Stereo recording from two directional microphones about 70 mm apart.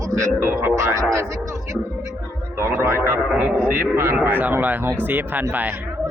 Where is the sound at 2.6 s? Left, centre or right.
Right.